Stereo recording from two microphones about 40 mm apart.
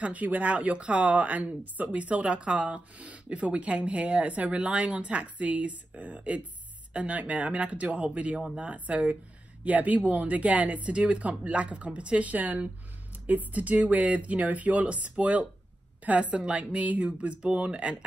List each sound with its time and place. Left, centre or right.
0.0 s speech: right